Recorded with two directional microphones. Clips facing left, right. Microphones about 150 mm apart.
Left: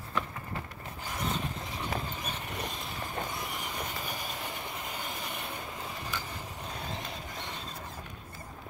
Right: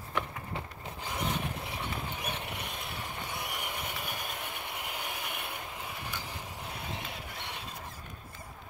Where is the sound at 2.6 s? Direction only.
65° right (ahead or behind).